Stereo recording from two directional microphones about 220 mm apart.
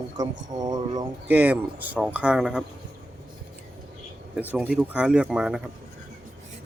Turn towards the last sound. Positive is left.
turn(degrees=-5)  # may be behind; listen again after turning